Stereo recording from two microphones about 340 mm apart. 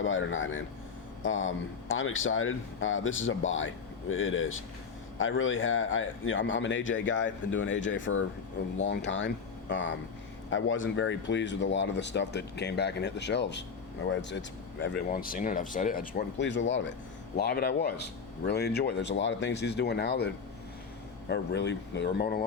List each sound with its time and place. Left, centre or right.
0.0 s speech: left